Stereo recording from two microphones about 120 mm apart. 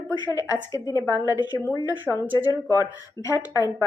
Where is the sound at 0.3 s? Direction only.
30° left (ahead or behind).